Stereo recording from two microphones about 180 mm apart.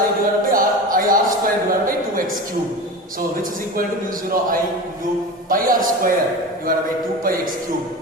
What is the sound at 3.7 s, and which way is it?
Speech, 50° right (ahead or behind).